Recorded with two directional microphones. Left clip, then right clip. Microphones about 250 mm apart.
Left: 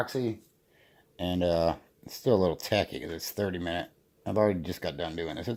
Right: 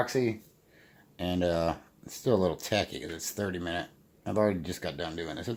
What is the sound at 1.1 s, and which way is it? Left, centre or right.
Speech, left.